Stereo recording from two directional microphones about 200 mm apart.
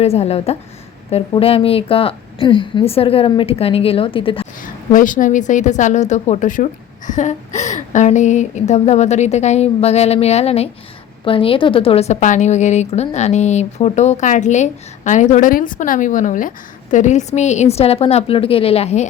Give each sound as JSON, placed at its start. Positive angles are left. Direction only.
{"t": 0.0, "sound": "a woman's voice", "side_deg": 30}
{"t": 4.6, "sound": "a woman's voice", "side_deg": 40}